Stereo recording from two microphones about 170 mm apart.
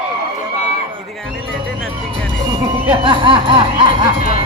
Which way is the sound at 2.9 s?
30° right (ahead or behind).